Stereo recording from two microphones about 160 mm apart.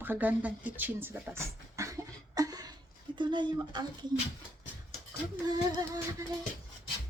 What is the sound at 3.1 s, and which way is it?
Speech, 30° right (ahead or behind).